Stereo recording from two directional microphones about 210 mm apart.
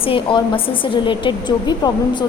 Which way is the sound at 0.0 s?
25° left (ahead or behind).